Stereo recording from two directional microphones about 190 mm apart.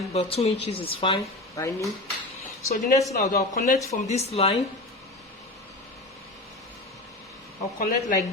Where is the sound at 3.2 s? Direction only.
50° left (ahead or behind).